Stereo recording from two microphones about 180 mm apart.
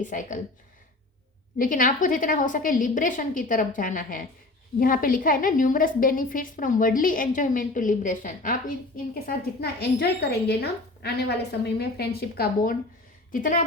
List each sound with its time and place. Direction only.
0.0 s a woman's voice: 45° left (ahead or behind)
1.5 s a woman's voice: 50° left (ahead or behind)
9.2 s a woman's voice: 60° left (ahead or behind)
13.3 s a woman's voice: 50° left (ahead or behind)